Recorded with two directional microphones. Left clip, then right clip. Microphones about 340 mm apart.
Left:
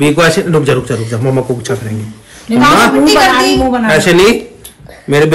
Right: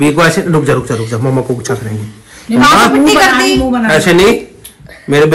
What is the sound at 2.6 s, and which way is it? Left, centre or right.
Speech, centre.